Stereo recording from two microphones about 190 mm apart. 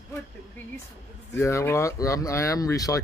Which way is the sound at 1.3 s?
15° left (ahead or behind).